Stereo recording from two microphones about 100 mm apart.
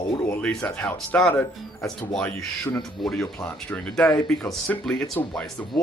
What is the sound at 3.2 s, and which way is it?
Speech, 25° left (ahead or behind).